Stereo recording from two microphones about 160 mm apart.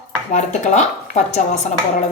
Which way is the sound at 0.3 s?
50° left (ahead or behind).